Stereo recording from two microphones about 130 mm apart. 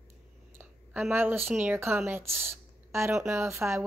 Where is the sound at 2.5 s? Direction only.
20° right (ahead or behind).